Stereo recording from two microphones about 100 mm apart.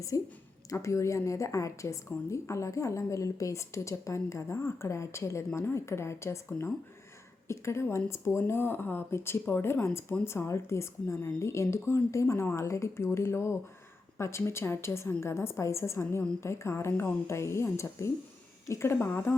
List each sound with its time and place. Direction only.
0.1 s a woman's voice: 35° left (ahead or behind)